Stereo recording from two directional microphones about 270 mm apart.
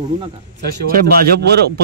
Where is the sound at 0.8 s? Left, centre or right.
Right.